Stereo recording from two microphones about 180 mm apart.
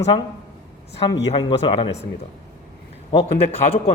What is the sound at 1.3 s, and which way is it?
Speech, 30° left (ahead or behind).